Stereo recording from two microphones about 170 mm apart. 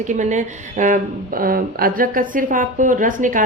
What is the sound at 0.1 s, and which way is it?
Speech, 45° right (ahead or behind).